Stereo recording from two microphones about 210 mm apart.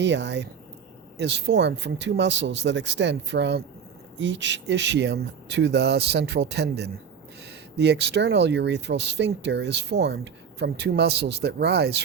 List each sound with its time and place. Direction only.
0.0 s speech: 55° right (ahead or behind)